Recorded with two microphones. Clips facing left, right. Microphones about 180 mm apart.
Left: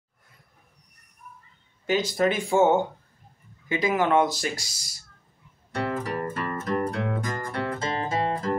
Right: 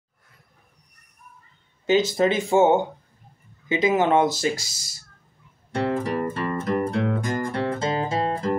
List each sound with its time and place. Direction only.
1.9 s speech: 25° right (ahead or behind)
5.7 s music: 25° right (ahead or behind)